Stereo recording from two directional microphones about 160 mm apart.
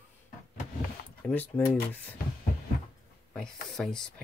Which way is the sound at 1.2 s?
10° left (ahead or behind).